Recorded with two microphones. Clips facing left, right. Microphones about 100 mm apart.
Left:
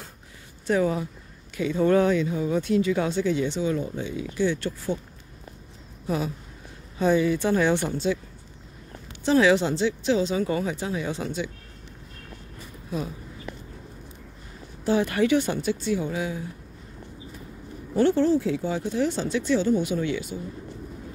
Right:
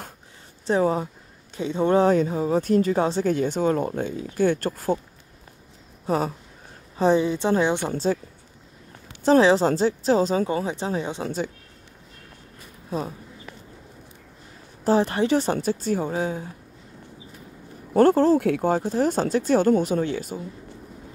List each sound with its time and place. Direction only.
0.7 s a woman's voice: 35° right (ahead or behind)
2.0 s a woman's voice: 40° right (ahead or behind)
3.3 s speech: 45° right (ahead or behind)
6.0 s speech: 40° right (ahead or behind)
7.0 s a woman's voice: 30° right (ahead or behind)
9.2 s a woman's voice: 35° right (ahead or behind)
11.2 s speech: 45° right (ahead or behind)
12.9 s a woman's voice: 30° right (ahead or behind)
14.9 s a woman's voice: 35° right (ahead or behind)
17.9 s speech: 40° right (ahead or behind)
18.4 s a woman's voice: 55° right (ahead or behind)